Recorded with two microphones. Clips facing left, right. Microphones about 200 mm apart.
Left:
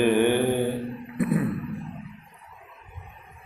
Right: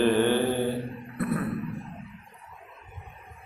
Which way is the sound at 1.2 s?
15° left (ahead or behind).